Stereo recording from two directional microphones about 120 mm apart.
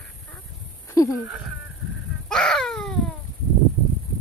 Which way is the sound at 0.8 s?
25° left (ahead or behind).